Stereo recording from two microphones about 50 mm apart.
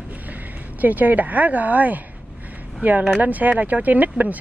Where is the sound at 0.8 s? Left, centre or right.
Right.